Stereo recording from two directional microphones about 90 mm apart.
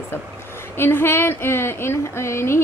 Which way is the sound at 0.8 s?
25° left (ahead or behind).